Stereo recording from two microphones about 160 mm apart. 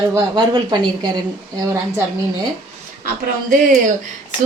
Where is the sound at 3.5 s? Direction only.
55° right (ahead or behind).